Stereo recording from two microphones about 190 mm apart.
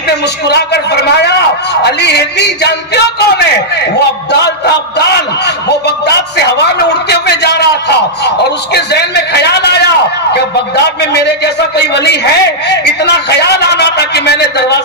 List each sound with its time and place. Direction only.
1.8 s a man's voice: 60° left (ahead or behind)
8.7 s a man's voice: 60° left (ahead or behind)
11.0 s a man's voice: 60° left (ahead or behind)